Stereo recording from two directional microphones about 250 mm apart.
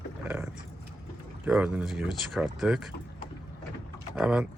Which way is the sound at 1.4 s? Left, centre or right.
Centre.